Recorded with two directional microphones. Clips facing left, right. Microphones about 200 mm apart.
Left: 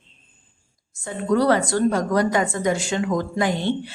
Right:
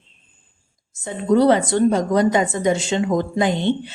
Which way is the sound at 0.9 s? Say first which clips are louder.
Right 4 dB; 20° right (ahead or behind).